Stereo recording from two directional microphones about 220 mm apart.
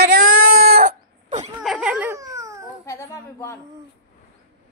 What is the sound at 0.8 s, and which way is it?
Wail, 30° right (ahead or behind).